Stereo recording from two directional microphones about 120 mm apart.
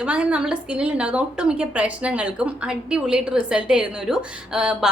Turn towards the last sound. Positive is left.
turn(degrees=-5)  # may be behind; listen again after turning